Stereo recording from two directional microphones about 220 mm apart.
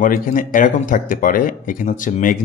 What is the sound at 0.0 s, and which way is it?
Speech, 40° left (ahead or behind).